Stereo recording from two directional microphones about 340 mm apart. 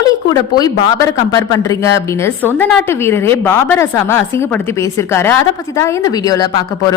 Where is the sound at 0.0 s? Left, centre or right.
Centre.